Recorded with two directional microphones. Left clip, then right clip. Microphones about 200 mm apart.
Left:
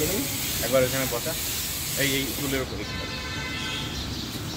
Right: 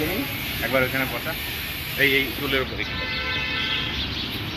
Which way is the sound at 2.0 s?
75° left (ahead or behind).